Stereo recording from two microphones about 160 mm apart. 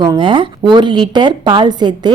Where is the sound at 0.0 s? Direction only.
30° right (ahead or behind).